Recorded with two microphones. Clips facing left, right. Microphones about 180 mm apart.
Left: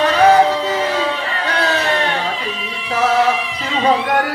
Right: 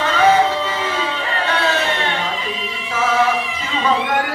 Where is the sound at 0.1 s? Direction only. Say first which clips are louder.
Left 1 dB; 40° left (ahead or behind).